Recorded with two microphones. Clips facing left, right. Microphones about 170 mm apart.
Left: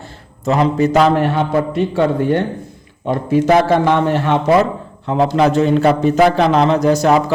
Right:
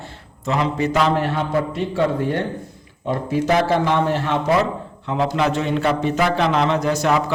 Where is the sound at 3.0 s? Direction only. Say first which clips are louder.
Left 6 dB; 55° left (ahead or behind).